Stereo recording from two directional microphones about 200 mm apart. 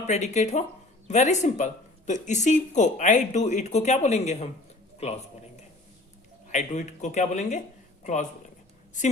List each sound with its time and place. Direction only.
0.1 s a man's voice: 35° left (ahead or behind)
6.5 s speech: 35° left (ahead or behind)